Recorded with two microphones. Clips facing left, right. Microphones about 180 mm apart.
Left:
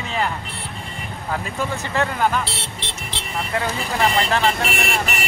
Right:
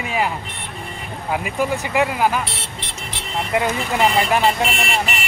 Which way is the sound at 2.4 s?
30° left (ahead or behind).